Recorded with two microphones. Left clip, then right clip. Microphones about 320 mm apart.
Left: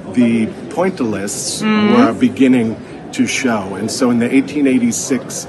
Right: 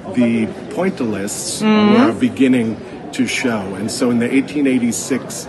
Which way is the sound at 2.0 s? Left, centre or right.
Centre.